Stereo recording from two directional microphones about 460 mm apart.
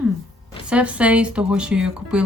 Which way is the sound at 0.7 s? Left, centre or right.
Centre.